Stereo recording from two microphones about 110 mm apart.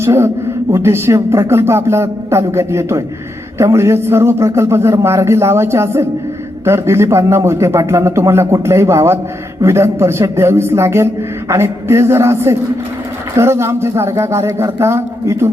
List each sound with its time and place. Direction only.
0.0 s a man's voice: 25° right (ahead or behind)